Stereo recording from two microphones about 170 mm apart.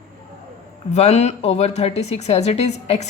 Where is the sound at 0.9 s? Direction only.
40° left (ahead or behind).